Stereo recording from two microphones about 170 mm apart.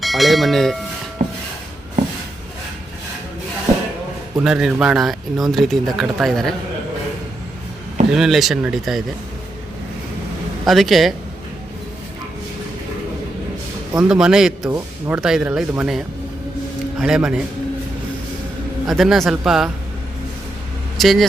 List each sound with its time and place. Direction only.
0.0 s speech: centre (ahead or behind)
1.2 s a sound: 50° right (ahead or behind)
4.4 s speech: 5° right (ahead or behind)
8.1 s speech: centre (ahead or behind)
10.7 s speech: centre (ahead or behind)
14.1 s speech: 5° right (ahead or behind)
14.7 s speech: 15° right (ahead or behind)
15.2 s speech: 5° right (ahead or behind)
18.9 s speech: centre (ahead or behind)
21.0 s speech: centre (ahead or behind)